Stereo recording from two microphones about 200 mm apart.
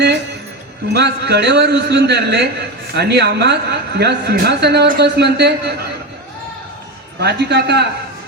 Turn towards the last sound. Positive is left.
turn(degrees=-55)  # may be behind; listen again after turning